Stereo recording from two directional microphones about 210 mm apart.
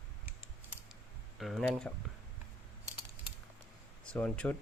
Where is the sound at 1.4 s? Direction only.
Centre (ahead or behind).